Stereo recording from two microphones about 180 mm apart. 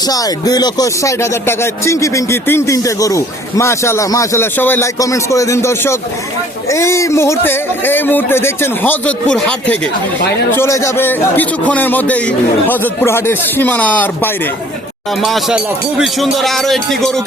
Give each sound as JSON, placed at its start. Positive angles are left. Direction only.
{"t": 0.0, "sound": "speech", "side_deg": 20}
{"t": 15.2, "sound": "speech", "side_deg": 0}